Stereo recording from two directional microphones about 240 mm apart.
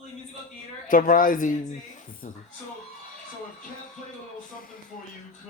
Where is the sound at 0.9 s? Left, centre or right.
Left.